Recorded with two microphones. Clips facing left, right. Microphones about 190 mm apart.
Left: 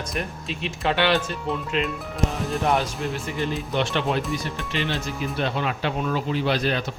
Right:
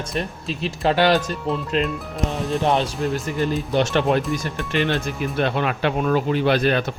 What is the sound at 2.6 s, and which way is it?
Speech, 25° right (ahead or behind).